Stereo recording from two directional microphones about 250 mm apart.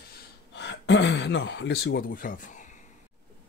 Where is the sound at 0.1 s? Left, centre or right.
Left.